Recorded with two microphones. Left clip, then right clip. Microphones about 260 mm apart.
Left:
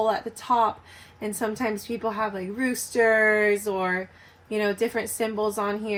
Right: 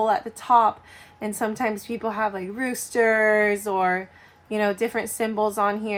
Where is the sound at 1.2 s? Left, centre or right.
Right.